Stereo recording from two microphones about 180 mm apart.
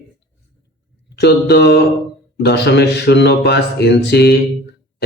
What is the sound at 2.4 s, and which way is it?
Speech, 65° left (ahead or behind).